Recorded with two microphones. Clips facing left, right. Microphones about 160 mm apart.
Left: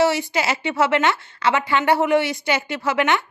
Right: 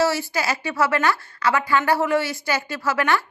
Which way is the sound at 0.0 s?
20° left (ahead or behind).